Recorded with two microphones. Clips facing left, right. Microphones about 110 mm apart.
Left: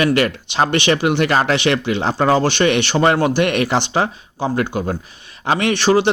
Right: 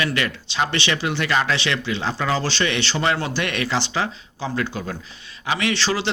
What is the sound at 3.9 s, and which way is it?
Speech, 50° left (ahead or behind).